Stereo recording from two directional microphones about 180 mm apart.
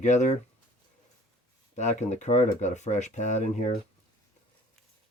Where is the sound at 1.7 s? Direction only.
40° left (ahead or behind).